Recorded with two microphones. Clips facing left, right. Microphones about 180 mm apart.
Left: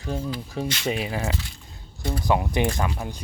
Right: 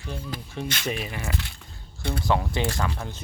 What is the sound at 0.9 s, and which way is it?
Speech, 25° left (ahead or behind).